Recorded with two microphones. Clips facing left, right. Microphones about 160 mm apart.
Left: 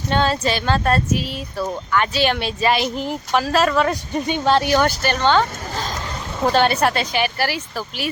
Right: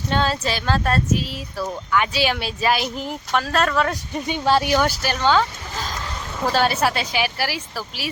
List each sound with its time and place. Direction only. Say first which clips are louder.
0.1 s speech: left 3 dB; centre (ahead or behind)
6.5 s speech: left 2 dB; 5° right (ahead or behind)